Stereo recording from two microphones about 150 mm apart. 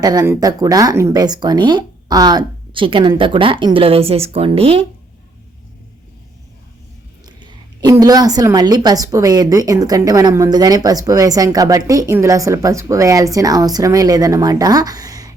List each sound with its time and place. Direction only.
0.0 s a woman's voice: 25° right (ahead or behind)
7.3 s a woman's voice: 30° right (ahead or behind)